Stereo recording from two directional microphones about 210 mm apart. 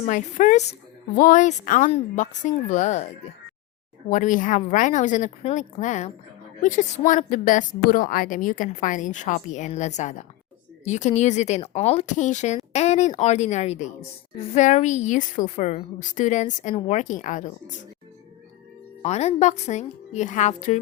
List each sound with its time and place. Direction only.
0.0 s a woman's voice: 35° left (ahead or behind)
4.1 s a woman's voice: 35° left (ahead or behind)
19.0 s a woman's voice: 30° left (ahead or behind)